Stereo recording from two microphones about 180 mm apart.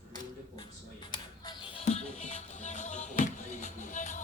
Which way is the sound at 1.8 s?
40° left (ahead or behind).